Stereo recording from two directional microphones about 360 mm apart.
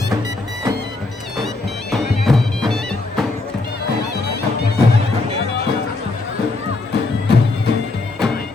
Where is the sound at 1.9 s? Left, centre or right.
Centre.